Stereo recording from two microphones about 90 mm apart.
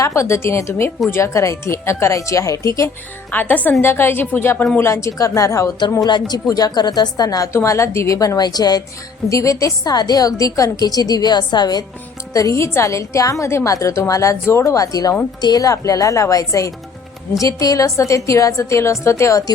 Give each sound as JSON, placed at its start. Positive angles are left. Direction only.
{"t": 0.0, "sound": "a woman's voice", "side_deg": 35}
{"t": 3.3, "sound": "a woman's voice", "side_deg": 20}
{"t": 4.8, "sound": "a woman's voice", "side_deg": 35}
{"t": 6.1, "sound": "a woman's voice", "side_deg": 55}
{"t": 7.5, "sound": "a woman's voice", "side_deg": 35}
{"t": 9.3, "sound": "a woman's voice", "side_deg": 35}
{"t": 12.3, "sound": "a woman's voice", "side_deg": 40}